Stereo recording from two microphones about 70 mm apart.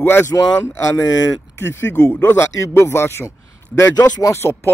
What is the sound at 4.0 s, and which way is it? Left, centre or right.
Speech, left.